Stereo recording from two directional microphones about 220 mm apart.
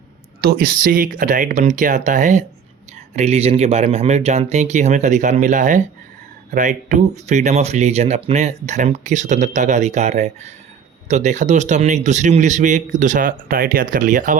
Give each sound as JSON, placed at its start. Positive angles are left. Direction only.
{"t": 0.4, "sound": "speech", "side_deg": -40}